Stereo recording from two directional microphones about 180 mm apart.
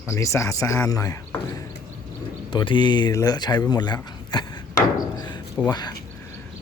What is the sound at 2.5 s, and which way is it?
Speech, 25° left (ahead or behind).